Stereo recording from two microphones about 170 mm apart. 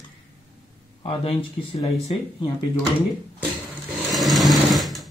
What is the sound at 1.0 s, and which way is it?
Speech, 30° left (ahead or behind).